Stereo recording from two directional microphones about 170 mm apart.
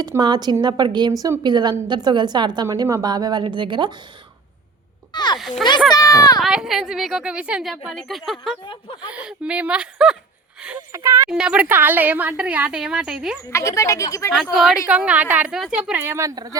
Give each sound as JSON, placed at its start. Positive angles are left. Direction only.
{"t": 0.0, "sound": "a woman's voice", "side_deg": -25}
{"t": 5.1, "sound": "a child's voice", "side_deg": 25}
{"t": 6.4, "sound": "a woman's voice", "side_deg": -5}
{"t": 8.6, "sound": "speech", "side_deg": 30}
{"t": 9.0, "sound": "speech", "side_deg": -5}
{"t": 10.9, "sound": "speech", "side_deg": -15}
{"t": 11.3, "sound": "speech", "side_deg": -5}
{"t": 13.5, "sound": "speech", "side_deg": 15}
{"t": 14.5, "sound": "a woman's voice", "side_deg": 0}